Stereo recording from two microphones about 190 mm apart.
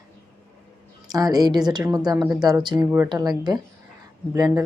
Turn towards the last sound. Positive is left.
turn(degrees=-20)  # may be behind; listen again after turning